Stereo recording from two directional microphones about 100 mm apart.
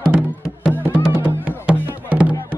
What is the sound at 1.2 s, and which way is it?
Music, 15° right (ahead or behind).